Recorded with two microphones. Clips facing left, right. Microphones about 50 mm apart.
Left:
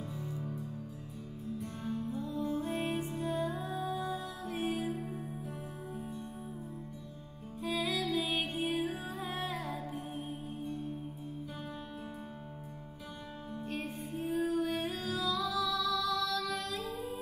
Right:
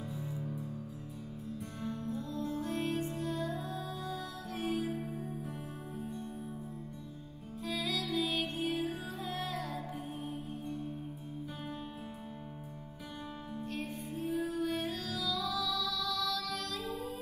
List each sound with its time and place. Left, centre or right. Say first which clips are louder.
1.8 s music: even; left
7.6 s music: left 3 dB; left
14.2 s music: left 2 dB; centre
14.8 s music: left 2 dB; left